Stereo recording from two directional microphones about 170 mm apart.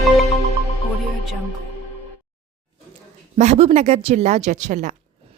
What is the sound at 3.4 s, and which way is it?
A woman's voice, 40° right (ahead or behind).